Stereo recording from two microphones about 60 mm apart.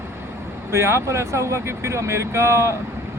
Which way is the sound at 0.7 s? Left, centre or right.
Right.